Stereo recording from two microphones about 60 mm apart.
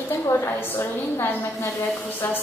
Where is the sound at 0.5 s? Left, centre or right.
Left.